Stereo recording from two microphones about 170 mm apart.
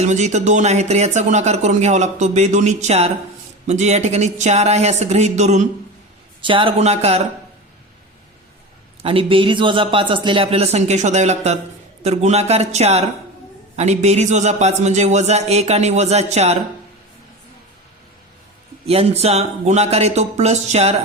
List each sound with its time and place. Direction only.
0.0 s a man's voice: 45° right (ahead or behind)
6.4 s a man's voice: 30° right (ahead or behind)
9.0 s a man's voice: 35° right (ahead or behind)
18.9 s a man's voice: 35° right (ahead or behind)